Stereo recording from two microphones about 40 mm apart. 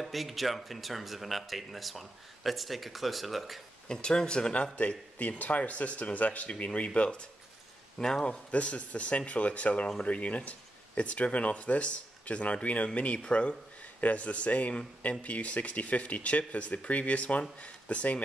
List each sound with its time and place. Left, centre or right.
0.0 s speech: centre
3.9 s speech: centre
4.7 s speech: left
6.9 s speech: left
8.5 s speech: left
14.0 s speech: left